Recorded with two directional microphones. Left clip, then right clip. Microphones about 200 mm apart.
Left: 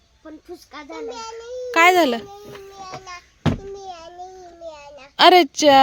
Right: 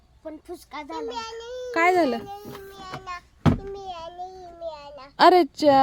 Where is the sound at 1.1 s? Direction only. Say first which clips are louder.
Left 1 dB; 5° right (ahead or behind).